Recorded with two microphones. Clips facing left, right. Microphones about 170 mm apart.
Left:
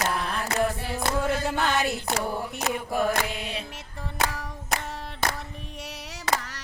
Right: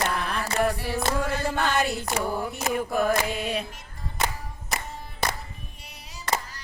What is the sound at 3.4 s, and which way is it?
Music, 55° right (ahead or behind).